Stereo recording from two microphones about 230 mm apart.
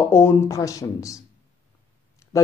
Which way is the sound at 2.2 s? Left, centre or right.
Centre.